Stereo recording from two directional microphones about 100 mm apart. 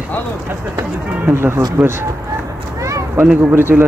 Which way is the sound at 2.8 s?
30° right (ahead or behind).